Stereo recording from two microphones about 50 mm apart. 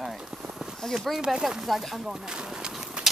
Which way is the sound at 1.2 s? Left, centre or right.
Centre.